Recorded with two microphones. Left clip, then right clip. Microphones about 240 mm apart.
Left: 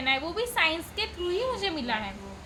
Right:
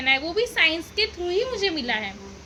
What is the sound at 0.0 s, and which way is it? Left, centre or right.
A woman's voice, centre.